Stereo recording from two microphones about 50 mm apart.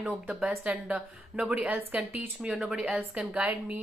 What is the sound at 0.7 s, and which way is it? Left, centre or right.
A woman's voice, right.